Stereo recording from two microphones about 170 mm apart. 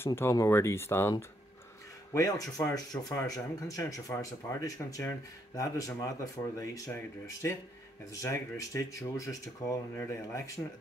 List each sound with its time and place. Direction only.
0.0 s speech: 15° left (ahead or behind)
8.1 s speech: 20° left (ahead or behind)